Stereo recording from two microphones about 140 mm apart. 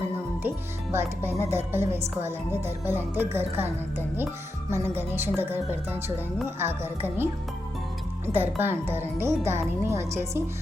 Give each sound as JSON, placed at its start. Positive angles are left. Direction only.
{"t": 0.4, "sound": "speech", "side_deg": -15}
{"t": 8.3, "sound": "a woman's voice", "side_deg": -15}